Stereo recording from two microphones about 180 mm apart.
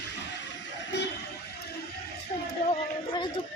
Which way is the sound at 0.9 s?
70° left (ahead or behind).